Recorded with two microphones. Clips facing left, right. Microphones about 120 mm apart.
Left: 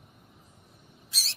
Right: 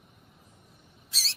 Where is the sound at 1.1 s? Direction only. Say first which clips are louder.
Right 1 dB; 15° left (ahead or behind).